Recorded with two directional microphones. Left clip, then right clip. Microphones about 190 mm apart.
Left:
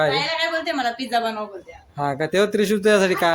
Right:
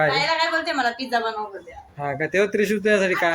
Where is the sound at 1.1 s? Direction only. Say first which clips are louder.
Left 1 dB; 20° left (ahead or behind).